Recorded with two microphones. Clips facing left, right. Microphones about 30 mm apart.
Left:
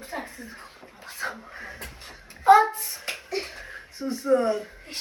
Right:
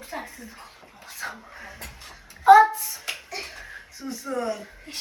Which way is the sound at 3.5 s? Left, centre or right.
Left.